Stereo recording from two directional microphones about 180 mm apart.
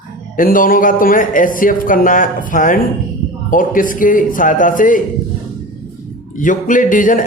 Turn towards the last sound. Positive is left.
turn(degrees=45)  # may be behind; listen again after turning